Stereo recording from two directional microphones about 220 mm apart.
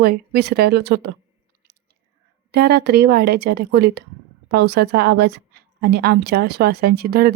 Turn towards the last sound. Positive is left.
turn(degrees=-45)  # may be behind; listen again after turning